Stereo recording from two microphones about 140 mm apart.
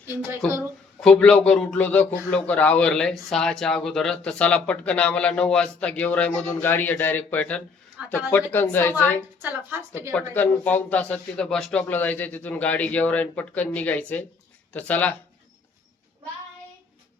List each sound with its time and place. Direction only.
1.0 s speech: 5° left (ahead or behind)
8.0 s a woman's voice: 5° right (ahead or behind)
8.5 s speech: 15° left (ahead or behind)
9.4 s a woman's voice: 15° right (ahead or behind)
10.1 s speech: 10° left (ahead or behind)